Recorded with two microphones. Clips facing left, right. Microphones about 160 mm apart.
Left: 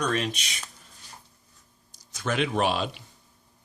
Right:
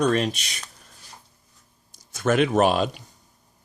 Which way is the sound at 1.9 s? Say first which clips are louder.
Right 8 dB; 50° right (ahead or behind).